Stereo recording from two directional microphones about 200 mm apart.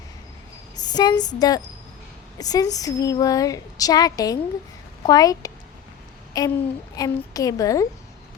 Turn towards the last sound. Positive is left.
turn(degrees=15)  # may be behind; listen again after turning